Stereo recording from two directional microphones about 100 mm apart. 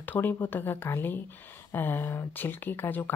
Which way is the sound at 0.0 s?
20° left (ahead or behind).